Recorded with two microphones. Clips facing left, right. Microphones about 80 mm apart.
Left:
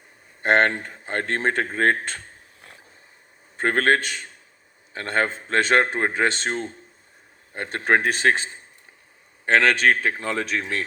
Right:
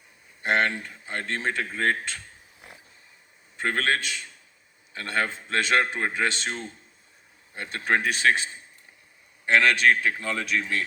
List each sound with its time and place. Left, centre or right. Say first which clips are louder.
0.4 s speech: left 5 dB; left
3.6 s a man's voice: left 6 dB; left